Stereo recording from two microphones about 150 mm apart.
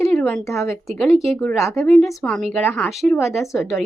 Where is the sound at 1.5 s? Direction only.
20° left (ahead or behind).